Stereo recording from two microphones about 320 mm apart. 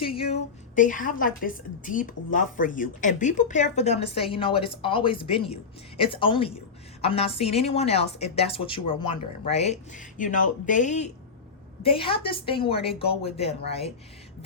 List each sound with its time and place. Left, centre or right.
0.0 s a woman's voice: centre